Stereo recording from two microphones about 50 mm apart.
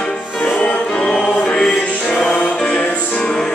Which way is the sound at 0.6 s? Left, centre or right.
Centre.